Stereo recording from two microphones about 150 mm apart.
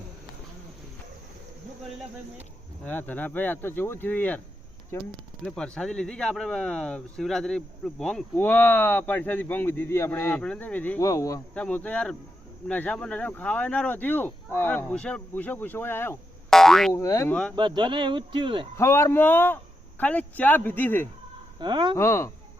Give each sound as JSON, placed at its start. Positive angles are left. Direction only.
{"t": 2.8, "sound": "speech", "side_deg": 10}
{"t": 5.5, "sound": "speech", "side_deg": 5}
{"t": 11.0, "sound": "speech", "side_deg": 20}
{"t": 11.5, "sound": "speech", "side_deg": 10}
{"t": 16.5, "sound": "boing", "side_deg": 5}
{"t": 16.9, "sound": "speech", "side_deg": 20}
{"t": 17.5, "sound": "speech", "side_deg": -30}
{"t": 18.8, "sound": "speech", "side_deg": 20}
{"t": 21.6, "sound": "speech", "side_deg": -30}
{"t": 21.9, "sound": "speech", "side_deg": 20}